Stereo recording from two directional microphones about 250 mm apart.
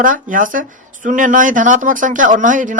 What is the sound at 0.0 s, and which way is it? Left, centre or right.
Speech, right.